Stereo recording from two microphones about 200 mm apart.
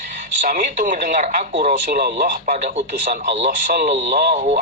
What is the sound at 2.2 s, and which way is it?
Speech, 40° right (ahead or behind).